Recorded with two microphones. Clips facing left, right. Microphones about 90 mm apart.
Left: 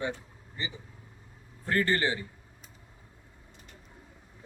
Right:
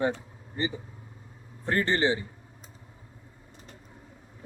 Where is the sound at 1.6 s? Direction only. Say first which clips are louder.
Right 2 dB; 25° right (ahead or behind).